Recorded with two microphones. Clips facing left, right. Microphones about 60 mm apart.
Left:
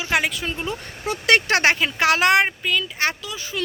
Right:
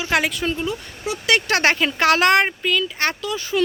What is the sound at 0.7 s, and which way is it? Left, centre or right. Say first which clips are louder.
Speech: right 1 dB; left.